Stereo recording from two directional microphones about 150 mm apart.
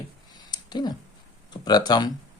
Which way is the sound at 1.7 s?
25° left (ahead or behind).